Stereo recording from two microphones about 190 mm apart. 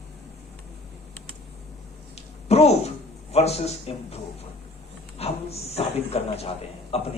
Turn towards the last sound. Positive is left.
turn(degrees=30)  # may be behind; listen again after turning